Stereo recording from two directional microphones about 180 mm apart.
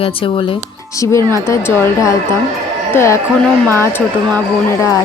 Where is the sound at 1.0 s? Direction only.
15° left (ahead or behind).